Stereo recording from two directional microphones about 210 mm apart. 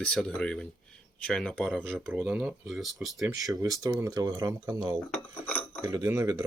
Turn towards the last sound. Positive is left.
turn(degrees=-15)  # may be behind; listen again after turning